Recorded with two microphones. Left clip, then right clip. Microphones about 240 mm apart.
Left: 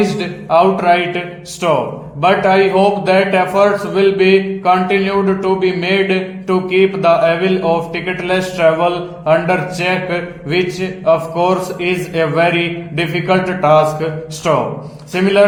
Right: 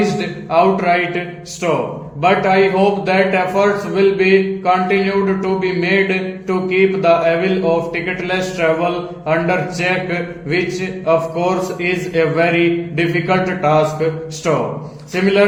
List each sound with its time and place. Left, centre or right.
0.0 s a man's voice: centre